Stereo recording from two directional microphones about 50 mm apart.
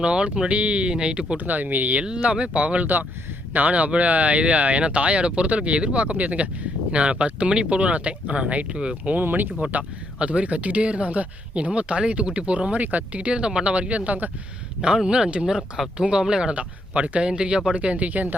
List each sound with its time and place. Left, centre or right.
0.0 s speech: centre
1.5 s speech: right
2.0 s speech: centre
9.1 s speech: right
10.2 s speech: right
14.8 s speech: centre
17.7 s speech: right